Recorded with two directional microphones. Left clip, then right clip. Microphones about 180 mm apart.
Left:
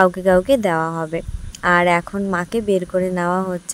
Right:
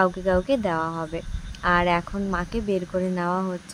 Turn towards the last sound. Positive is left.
turn(degrees=40)  # may be behind; listen again after turning